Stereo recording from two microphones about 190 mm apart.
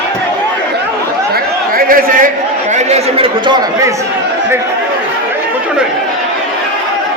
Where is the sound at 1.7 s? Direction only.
50° right (ahead or behind).